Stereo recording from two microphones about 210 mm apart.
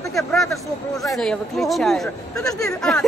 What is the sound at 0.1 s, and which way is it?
Speech, centre (ahead or behind).